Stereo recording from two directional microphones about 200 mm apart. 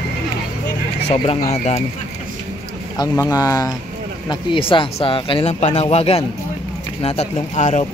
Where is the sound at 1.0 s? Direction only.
30° left (ahead or behind).